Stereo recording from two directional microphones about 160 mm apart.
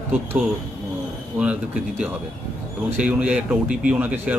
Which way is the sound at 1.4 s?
10° right (ahead or behind).